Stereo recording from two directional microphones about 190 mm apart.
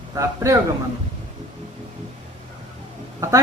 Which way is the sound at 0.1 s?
15° right (ahead or behind).